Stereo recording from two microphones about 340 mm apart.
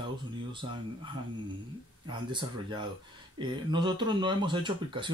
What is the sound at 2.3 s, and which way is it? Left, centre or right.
Speech, centre.